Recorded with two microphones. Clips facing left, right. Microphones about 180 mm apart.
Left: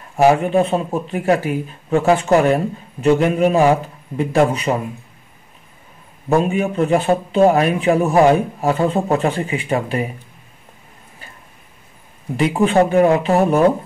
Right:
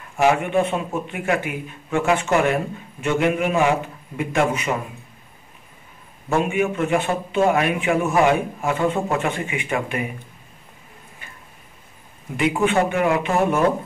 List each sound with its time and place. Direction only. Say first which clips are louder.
0.2 s a man's voice: left 5 dB; 35° left (ahead or behind)
6.2 s a man's voice: left 4 dB; 35° left (ahead or behind)
12.4 s a man's voice: left 4 dB; 35° left (ahead or behind)